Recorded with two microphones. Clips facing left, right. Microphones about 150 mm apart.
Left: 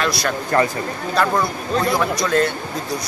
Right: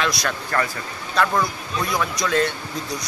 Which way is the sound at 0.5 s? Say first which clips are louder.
Left 7 dB; 20° left (ahead or behind).